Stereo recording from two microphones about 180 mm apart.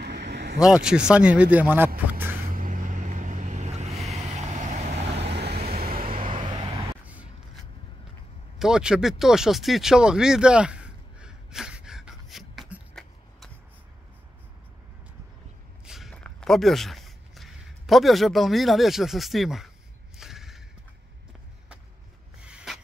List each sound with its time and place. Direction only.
0.0 s vehicle: 70° right (ahead or behind)
0.6 s speech: 5° right (ahead or behind)
2.1 s vehicle: 10° right (ahead or behind)
2.4 s vehicle: 50° right (ahead or behind)
5.3 s vehicle: 65° right (ahead or behind)
6.2 s vehicle: 30° right (ahead or behind)
8.5 s a sound: 5° right (ahead or behind)
15.8 s a sound: centre (ahead or behind)
20.2 s mechanisms: centre (ahead or behind)
22.4 s a sound: 5° right (ahead or behind)